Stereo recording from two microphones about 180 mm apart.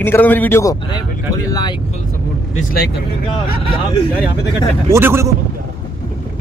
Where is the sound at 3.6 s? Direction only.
30° left (ahead or behind).